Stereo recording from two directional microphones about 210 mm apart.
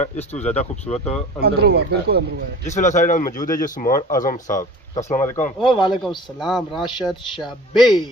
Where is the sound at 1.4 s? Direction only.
50° right (ahead or behind).